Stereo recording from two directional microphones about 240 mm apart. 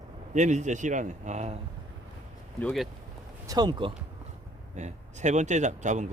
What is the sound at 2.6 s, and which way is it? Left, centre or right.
Speech, centre.